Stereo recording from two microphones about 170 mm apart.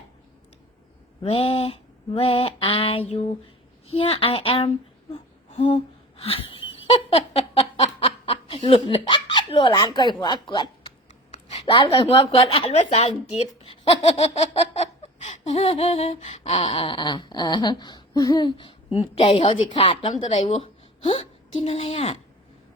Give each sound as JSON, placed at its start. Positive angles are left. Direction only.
{"t": 1.2, "sound": "speech", "side_deg": 35}
{"t": 5.7, "sound": "laughter", "side_deg": 35}
{"t": 11.6, "sound": "speech", "side_deg": 30}
{"t": 15.2, "sound": "a sound", "side_deg": 40}
{"t": 16.6, "sound": "a sound", "side_deg": 30}
{"t": 18.9, "sound": "speech", "side_deg": 35}